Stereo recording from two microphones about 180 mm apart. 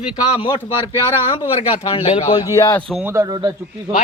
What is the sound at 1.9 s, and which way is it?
Speech, 35° left (ahead or behind).